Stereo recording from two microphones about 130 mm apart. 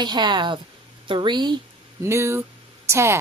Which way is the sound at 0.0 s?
35° right (ahead or behind).